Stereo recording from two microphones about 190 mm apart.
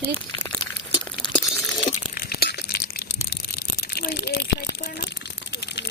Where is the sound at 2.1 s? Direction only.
55° left (ahead or behind).